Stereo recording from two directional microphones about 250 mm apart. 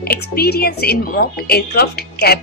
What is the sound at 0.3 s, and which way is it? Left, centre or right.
Speech, left.